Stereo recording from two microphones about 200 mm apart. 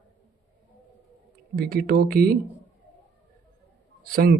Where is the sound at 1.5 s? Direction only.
50° right (ahead or behind).